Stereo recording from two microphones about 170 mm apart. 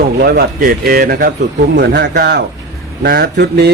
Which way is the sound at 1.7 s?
75° right (ahead or behind).